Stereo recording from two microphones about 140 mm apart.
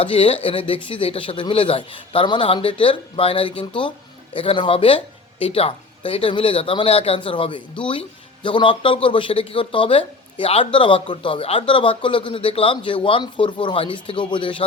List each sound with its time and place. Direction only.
0.0 s speech: 40° left (ahead or behind)